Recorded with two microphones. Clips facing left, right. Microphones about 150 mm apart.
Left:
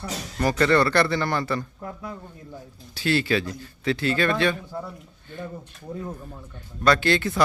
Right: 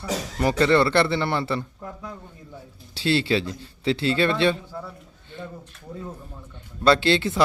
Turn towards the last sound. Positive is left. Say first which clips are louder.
# right 1 dB
turn(degrees=-25)  # may be behind; listen again after turning